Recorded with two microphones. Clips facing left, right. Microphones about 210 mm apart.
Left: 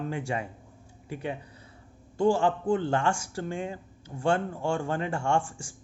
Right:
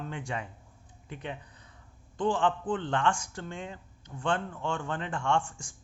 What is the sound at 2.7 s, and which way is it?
Speech, 10° left (ahead or behind).